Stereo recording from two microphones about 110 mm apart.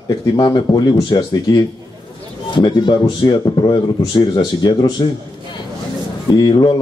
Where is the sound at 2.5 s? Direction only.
45° left (ahead or behind).